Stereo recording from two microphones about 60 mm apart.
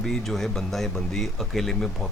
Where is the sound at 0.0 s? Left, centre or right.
Centre.